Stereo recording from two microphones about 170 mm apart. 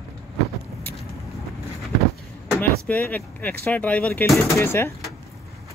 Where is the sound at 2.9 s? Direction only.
10° left (ahead or behind).